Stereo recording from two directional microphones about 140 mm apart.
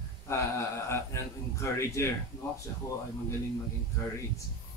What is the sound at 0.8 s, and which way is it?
A man's voice, 20° left (ahead or behind).